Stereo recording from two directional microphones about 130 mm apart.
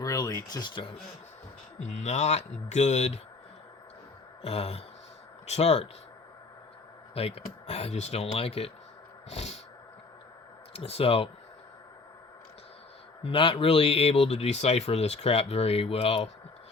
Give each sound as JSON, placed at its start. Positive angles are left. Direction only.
{"t": 0.0, "sound": "speech", "side_deg": 25}
{"t": 1.8, "sound": "speech", "side_deg": 65}
{"t": 4.4, "sound": "speech", "side_deg": 50}
{"t": 7.1, "sound": "speech", "side_deg": 50}
{"t": 10.8, "sound": "speech", "side_deg": 50}
{"t": 13.2, "sound": "speech", "side_deg": 45}